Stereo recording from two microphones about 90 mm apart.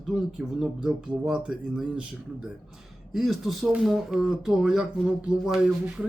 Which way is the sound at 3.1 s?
5° right (ahead or behind).